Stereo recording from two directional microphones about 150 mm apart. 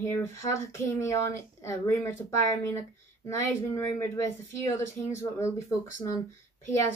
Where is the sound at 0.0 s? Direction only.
15° left (ahead or behind).